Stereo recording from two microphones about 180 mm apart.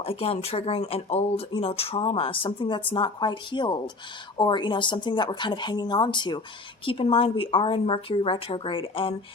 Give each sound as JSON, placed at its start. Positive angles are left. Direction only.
{"t": 0.0, "sound": "a woman's voice", "side_deg": 35}